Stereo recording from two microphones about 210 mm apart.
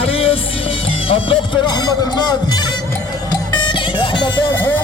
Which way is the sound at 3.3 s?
20° left (ahead or behind).